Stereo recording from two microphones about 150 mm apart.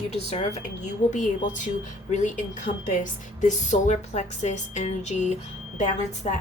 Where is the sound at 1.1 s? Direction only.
55° left (ahead or behind).